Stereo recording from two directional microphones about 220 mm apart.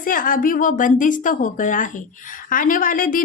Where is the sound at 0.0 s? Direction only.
40° left (ahead or behind).